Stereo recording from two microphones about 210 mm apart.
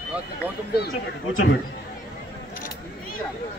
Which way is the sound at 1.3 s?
70° left (ahead or behind).